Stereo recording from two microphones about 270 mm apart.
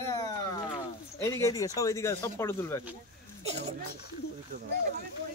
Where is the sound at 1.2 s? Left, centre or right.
Centre.